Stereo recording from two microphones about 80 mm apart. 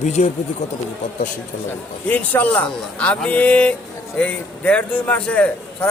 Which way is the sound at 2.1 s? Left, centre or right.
Left.